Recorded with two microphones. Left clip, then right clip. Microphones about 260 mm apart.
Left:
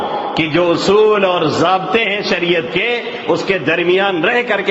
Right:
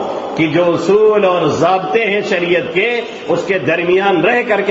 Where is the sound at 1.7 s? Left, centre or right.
Left.